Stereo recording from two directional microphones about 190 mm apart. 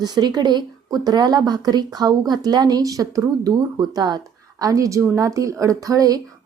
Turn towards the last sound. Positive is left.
turn(degrees=-20)  # may be behind; listen again after turning